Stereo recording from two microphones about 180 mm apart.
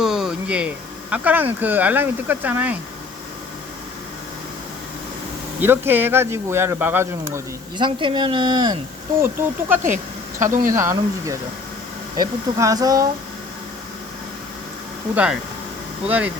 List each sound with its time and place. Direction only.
0.0 s a sound: 5° right (ahead or behind)
1.1 s speech: 10° right (ahead or behind)
5.5 s speech: 10° right (ahead or behind)
7.8 s speech: 25° right (ahead or behind)
9.2 s speech: 10° right (ahead or behind)
10.4 s speech: 45° right (ahead or behind)
10.8 s speech: 15° right (ahead or behind)
15.1 s speech: 5° right (ahead or behind)